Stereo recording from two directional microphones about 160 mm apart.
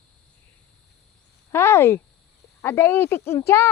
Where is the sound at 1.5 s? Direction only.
15° left (ahead or behind).